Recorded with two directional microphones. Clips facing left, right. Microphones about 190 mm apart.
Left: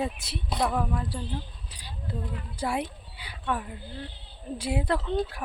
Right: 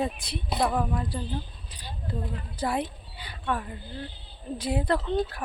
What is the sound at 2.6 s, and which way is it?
Speech, 10° left (ahead or behind).